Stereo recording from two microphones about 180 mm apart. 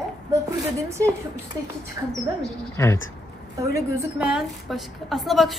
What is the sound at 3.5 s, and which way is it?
Speech, 15° right (ahead or behind).